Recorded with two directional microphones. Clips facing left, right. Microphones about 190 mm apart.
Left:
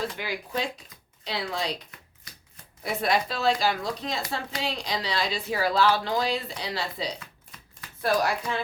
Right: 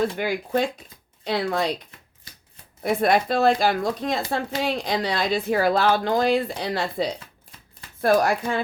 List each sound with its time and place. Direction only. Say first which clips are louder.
0.0 s speech: right 8 dB; 50° right (ahead or behind)
2.8 s speech: right 6 dB; 50° right (ahead or behind)